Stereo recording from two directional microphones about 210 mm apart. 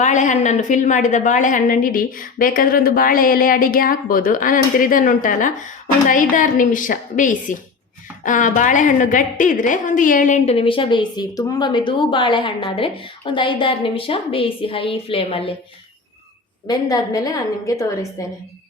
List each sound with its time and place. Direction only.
0.0 s a woman's voice: 35° left (ahead or behind)
16.6 s a woman's voice: 15° left (ahead or behind)